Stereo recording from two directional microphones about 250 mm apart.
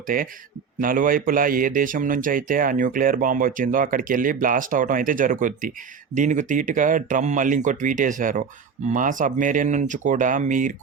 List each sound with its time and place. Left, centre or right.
0.1 s a man's voice: right